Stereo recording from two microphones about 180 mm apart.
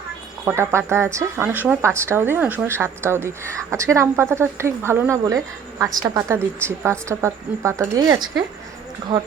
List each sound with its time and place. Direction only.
0.4 s a woman's voice: 15° right (ahead or behind)